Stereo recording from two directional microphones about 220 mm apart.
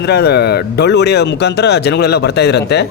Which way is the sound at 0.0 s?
50° left (ahead or behind).